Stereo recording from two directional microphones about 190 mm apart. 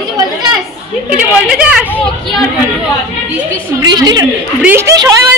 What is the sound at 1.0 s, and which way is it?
A woman's voice, 5° right (ahead or behind).